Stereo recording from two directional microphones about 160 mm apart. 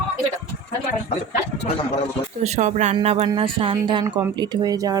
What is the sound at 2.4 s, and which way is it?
A woman's voice, 45° right (ahead or behind).